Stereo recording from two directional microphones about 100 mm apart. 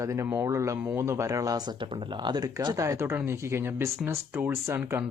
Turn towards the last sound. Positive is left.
turn(degrees=-25)  # may be behind; listen again after turning